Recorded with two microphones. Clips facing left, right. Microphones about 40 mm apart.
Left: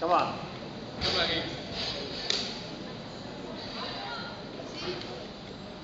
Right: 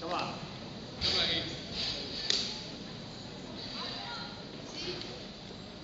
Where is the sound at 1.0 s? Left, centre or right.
Centre.